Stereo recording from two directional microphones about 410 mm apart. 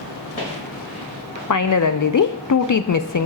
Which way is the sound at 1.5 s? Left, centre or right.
Left.